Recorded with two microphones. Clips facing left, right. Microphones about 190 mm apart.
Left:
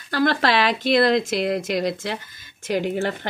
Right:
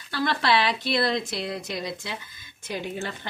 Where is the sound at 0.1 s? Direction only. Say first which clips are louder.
Left 4 dB; 90° left.